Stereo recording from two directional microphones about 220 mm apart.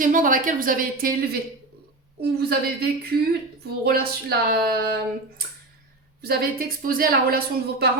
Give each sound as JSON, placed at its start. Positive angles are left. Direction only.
{"t": 0.0, "sound": "a woman's voice", "side_deg": -35}
{"t": 2.4, "sound": "speech", "side_deg": -45}
{"t": 6.2, "sound": "a woman's voice", "side_deg": -45}